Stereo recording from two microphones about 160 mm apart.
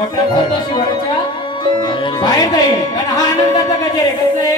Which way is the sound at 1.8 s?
30° left (ahead or behind).